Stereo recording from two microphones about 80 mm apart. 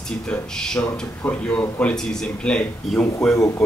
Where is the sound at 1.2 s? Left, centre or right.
Centre.